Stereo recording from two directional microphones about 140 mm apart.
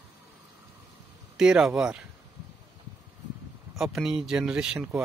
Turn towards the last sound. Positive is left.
turn(degrees=-5)  # may be behind; listen again after turning